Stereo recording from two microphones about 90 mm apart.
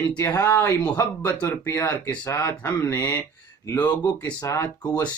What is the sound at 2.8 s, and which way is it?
Speech, 20° left (ahead or behind).